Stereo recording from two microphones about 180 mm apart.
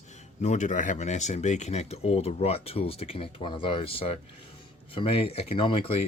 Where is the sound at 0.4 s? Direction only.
40° left (ahead or behind).